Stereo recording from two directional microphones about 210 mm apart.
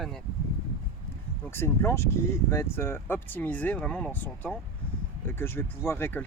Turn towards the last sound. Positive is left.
turn(degrees=10)  # may be behind; listen again after turning